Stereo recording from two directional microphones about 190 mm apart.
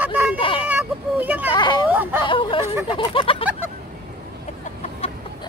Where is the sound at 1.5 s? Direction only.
25° left (ahead or behind).